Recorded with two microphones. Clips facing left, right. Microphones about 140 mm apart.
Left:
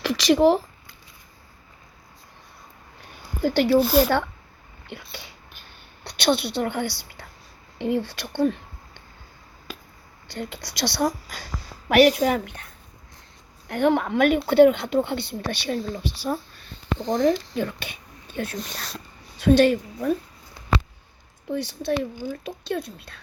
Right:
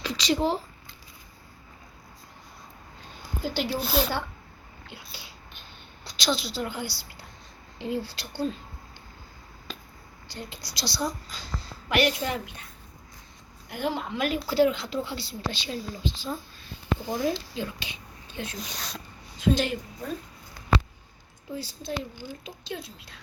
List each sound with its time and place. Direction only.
0.0 s speech: 90° left
3.4 s speech: 65° left (ahead or behind)
3.8 s a woman's voice: 5° left (ahead or behind)
6.1 s a woman's voice: 60° left (ahead or behind)
9.7 s a sound: 10° left (ahead or behind)
10.3 s speech: 70° left (ahead or behind)
11.9 s speech: 60° left (ahead or behind)
13.7 s a woman's voice: 60° left (ahead or behind)
21.5 s speech: 70° left (ahead or behind)
22.2 s speech: 55° left (ahead or behind)